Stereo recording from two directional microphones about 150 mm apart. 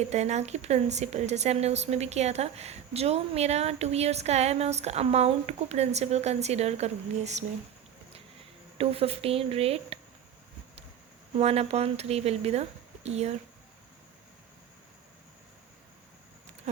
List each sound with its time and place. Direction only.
0.1 s a woman's voice: 50° right (ahead or behind)
8.8 s speech: 40° right (ahead or behind)
11.3 s a woman's voice: 45° right (ahead or behind)